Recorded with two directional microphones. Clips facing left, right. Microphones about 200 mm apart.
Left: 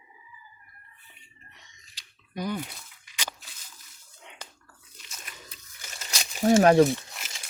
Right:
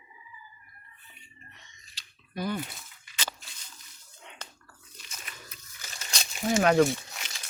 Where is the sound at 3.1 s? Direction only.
15° left (ahead or behind).